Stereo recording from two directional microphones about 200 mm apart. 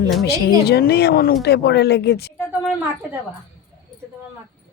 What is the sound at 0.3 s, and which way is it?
A woman's voice, 55° left (ahead or behind).